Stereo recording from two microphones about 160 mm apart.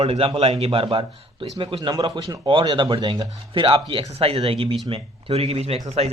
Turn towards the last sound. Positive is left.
turn(degrees=-40)  # may be behind; listen again after turning